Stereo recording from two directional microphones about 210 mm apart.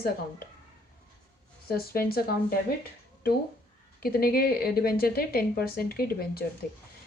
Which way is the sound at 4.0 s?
45° left (ahead or behind).